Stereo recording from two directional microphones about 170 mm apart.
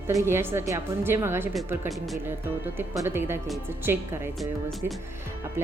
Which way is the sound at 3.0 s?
15° right (ahead or behind).